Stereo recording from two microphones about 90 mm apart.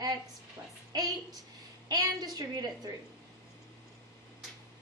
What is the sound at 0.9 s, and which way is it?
A woman's voice, 50° right (ahead or behind).